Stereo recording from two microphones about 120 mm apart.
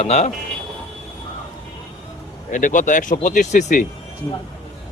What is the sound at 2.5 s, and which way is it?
Speech, 90° left.